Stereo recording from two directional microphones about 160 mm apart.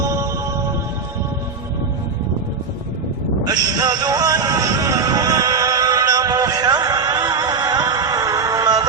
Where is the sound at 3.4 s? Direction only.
25° right (ahead or behind).